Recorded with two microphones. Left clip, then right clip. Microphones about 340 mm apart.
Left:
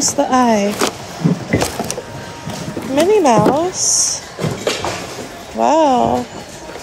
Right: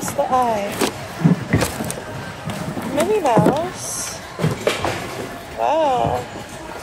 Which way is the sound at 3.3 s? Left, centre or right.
Left.